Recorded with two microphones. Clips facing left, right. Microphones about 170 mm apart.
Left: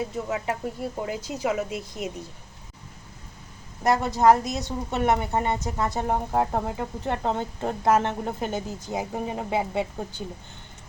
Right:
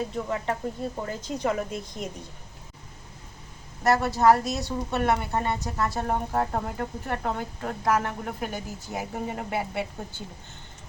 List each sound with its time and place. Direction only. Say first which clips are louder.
0.0 s speech: left 1 dB; 10° left (ahead or behind)
3.8 s speech: left 1 dB; 20° left (ahead or behind)
7.0 s speech: left 5 dB; 25° left (ahead or behind)